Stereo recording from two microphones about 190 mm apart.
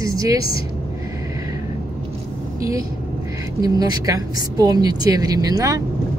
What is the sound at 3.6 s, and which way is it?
Speech, 20° right (ahead or behind).